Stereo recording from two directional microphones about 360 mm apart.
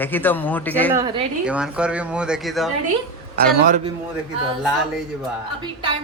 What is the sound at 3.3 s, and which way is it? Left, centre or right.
Speech, right.